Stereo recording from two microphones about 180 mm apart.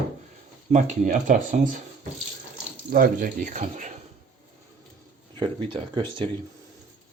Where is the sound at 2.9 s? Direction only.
50° right (ahead or behind).